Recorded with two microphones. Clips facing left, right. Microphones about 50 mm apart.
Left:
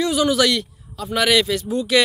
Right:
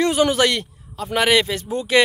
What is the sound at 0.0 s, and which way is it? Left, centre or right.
A man's voice, right.